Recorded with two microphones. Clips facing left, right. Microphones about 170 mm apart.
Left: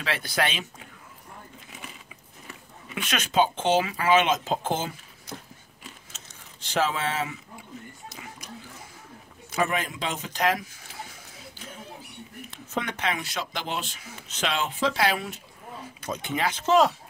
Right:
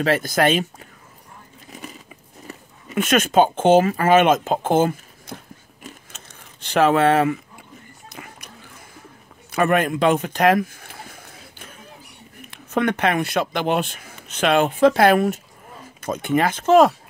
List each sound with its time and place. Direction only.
0.0 s speech: 45° right (ahead or behind)
2.4 s speech: 45° right (ahead or behind)
5.9 s crumpling: 60° right (ahead or behind)
8.1 s a sound: 60° right (ahead or behind)
9.5 s a sound: 60° right (ahead or behind)
12.4 s speech: 55° right (ahead or behind)